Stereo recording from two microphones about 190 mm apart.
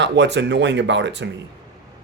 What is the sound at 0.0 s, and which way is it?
Speech, 70° right (ahead or behind).